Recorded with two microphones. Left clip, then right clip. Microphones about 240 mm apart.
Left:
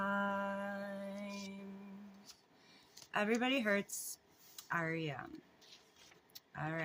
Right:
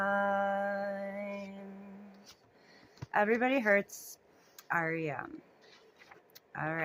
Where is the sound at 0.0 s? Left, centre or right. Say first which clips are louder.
Right 7 dB; left.